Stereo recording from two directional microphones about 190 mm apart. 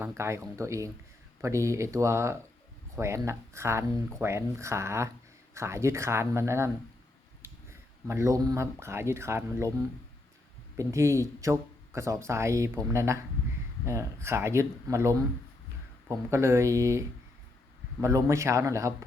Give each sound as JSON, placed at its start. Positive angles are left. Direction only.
{"t": 0.2, "sound": "speech", "side_deg": -15}
{"t": 10.8, "sound": "speech", "side_deg": -15}